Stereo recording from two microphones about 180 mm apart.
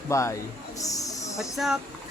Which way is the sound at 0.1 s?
15° left (ahead or behind).